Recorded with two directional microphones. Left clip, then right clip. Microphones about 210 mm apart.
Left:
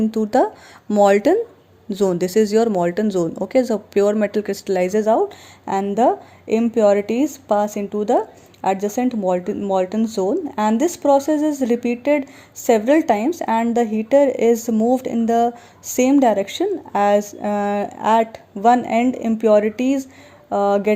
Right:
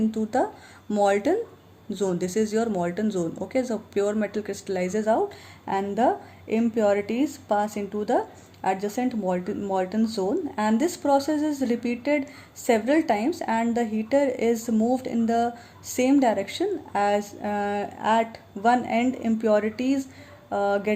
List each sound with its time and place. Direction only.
0.0 s speech: 35° left (ahead or behind)